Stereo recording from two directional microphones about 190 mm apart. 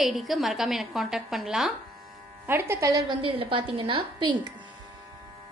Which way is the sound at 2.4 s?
10° right (ahead or behind).